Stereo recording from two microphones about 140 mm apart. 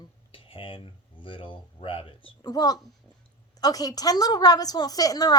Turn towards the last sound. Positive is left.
turn(degrees=25)  # may be behind; listen again after turning